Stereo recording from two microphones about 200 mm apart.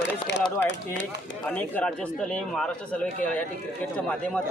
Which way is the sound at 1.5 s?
5° left (ahead or behind).